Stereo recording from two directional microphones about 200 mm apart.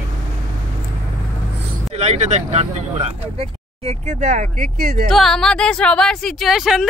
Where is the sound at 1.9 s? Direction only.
30° right (ahead or behind); by 5.1 s 45° right (ahead or behind).